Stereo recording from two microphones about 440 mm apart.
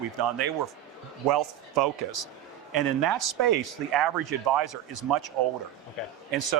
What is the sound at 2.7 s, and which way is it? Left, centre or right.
Speech, right.